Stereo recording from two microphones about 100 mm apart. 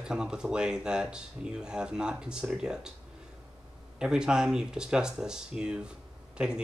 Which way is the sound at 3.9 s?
10° right (ahead or behind).